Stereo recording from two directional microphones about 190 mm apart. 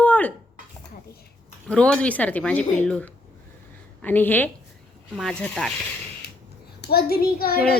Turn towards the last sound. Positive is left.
turn(degrees=50)  # may be behind; listen again after turning